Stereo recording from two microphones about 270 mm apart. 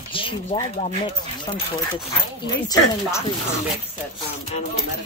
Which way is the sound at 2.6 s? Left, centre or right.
Centre.